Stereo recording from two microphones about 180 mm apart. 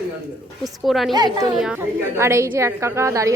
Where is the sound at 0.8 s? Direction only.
Centre (ahead or behind).